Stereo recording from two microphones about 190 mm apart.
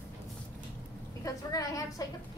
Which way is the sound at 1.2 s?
20° left (ahead or behind).